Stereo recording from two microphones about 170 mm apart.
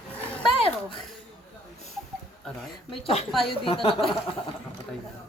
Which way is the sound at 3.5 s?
30° left (ahead or behind).